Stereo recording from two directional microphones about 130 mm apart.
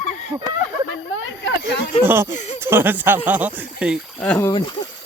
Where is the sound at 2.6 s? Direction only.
15° right (ahead or behind).